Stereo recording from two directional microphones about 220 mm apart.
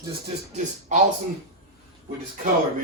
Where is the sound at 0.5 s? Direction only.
35° right (ahead or behind).